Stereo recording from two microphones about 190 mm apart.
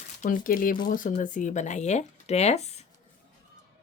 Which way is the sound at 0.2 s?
45° left (ahead or behind).